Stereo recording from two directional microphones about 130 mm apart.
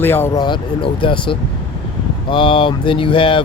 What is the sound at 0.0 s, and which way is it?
Speech, 15° left (ahead or behind).